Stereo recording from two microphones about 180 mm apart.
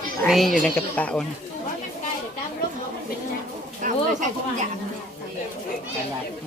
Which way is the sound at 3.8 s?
45° right (ahead or behind).